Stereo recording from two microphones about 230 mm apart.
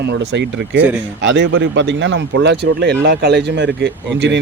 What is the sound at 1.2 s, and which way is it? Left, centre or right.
A man's voice, right.